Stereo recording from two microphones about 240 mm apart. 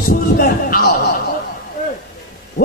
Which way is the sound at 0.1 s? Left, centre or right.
Left.